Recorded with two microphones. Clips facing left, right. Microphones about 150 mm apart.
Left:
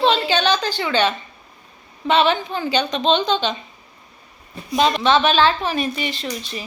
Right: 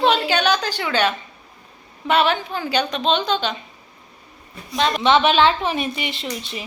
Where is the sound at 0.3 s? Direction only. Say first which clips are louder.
Left 1 dB; 10° right (ahead or behind).